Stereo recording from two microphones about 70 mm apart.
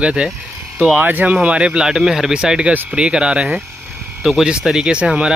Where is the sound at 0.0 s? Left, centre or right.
Centre.